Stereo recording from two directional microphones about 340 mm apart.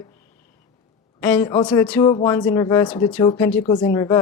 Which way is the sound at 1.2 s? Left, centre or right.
Centre.